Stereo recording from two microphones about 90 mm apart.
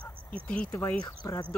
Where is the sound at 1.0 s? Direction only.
40° left (ahead or behind).